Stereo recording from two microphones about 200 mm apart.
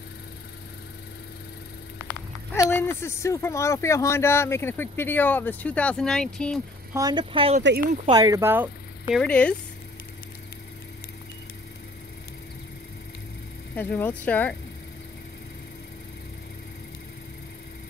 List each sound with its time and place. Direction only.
2.5 s speech: 15° left (ahead or behind)
6.9 s speech: 20° right (ahead or behind)
9.1 s speech: 5° left (ahead or behind)
13.7 s speech: 10° left (ahead or behind)